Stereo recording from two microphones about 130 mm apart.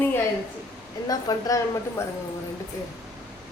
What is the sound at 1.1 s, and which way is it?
Speech, 30° left (ahead or behind).